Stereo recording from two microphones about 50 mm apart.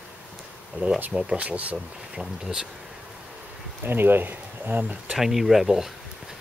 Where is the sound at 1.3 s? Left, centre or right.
Right.